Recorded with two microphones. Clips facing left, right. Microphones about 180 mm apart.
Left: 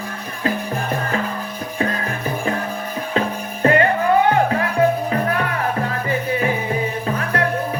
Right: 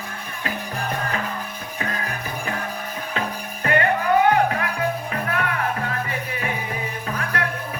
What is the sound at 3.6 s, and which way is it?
Music, 25° left (ahead or behind).